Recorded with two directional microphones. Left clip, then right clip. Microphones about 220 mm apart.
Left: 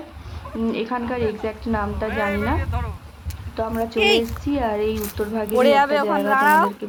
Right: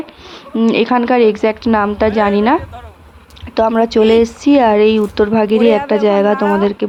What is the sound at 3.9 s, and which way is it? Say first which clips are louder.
A woman's voice: right 5 dB; 35° right (ahead or behind).